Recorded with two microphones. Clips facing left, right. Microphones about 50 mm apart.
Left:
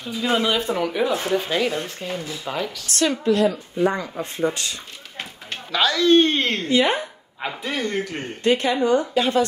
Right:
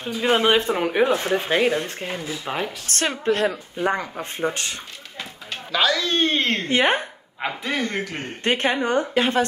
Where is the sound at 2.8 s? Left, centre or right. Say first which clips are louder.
Left 3 dB; right.